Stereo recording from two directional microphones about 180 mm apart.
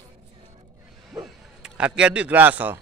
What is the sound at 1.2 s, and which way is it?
A man's voice, 5° right (ahead or behind).